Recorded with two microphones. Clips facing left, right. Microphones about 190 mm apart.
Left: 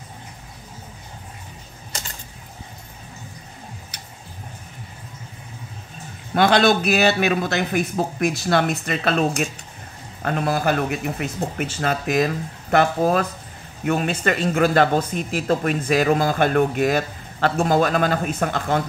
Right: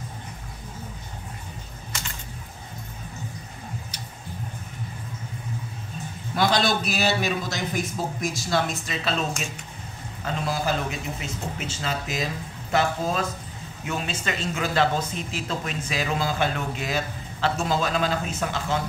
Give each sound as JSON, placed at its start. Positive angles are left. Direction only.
{"t": 6.3, "sound": "speech", "side_deg": 60}
{"t": 10.2, "sound": "speech", "side_deg": 60}